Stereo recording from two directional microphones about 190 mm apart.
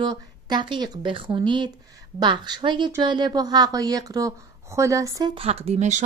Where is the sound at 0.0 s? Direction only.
20° right (ahead or behind).